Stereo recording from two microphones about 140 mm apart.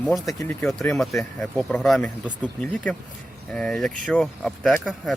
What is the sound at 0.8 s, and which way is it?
Speech, centre (ahead or behind).